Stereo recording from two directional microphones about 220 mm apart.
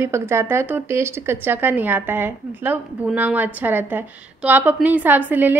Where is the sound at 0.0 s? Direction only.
10° right (ahead or behind).